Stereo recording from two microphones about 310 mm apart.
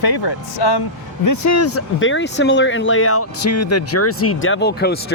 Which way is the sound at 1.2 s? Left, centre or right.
Left.